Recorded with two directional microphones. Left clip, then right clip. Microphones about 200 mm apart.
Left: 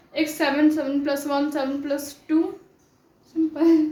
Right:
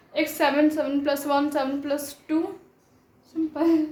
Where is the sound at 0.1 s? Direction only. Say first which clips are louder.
Even; 20° right (ahead or behind).